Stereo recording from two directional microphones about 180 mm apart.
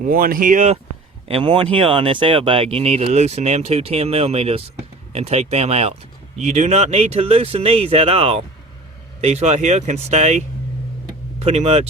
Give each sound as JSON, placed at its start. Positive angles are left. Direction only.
{"t": 0.0, "sound": "speech", "side_deg": -50}
{"t": 1.3, "sound": "speech", "side_deg": -30}